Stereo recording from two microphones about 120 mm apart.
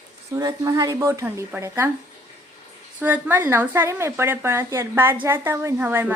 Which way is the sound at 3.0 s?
15° right (ahead or behind).